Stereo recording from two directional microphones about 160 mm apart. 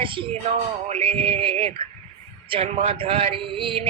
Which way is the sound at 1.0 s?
10° left (ahead or behind).